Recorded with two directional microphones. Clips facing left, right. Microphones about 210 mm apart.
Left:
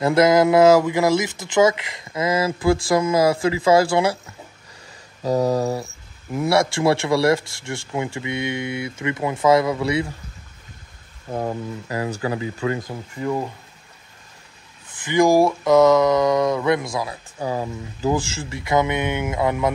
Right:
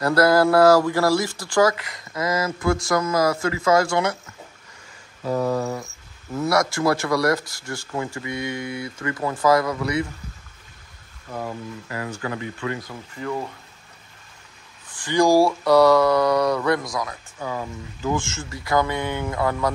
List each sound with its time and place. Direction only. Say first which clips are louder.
0.0 s speech: left 2 dB; 20° left (ahead or behind)
5.2 s a sound: left 3 dB; 35° left (ahead or behind)
6.4 s speech: left 2 dB; 30° left (ahead or behind)
11.3 s a sound: left 5 dB; 35° left (ahead or behind)
12.2 s speech: left 4 dB; 30° left (ahead or behind)
14.9 s speech: left 1 dB; 20° left (ahead or behind)